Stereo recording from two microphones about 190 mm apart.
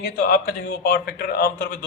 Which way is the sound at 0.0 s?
55° left (ahead or behind).